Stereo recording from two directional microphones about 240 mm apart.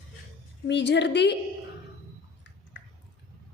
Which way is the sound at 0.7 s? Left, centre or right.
Left.